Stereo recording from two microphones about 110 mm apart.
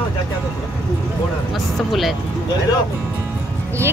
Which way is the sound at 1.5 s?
Centre (ahead or behind).